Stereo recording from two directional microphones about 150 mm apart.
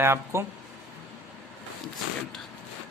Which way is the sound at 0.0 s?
15° right (ahead or behind).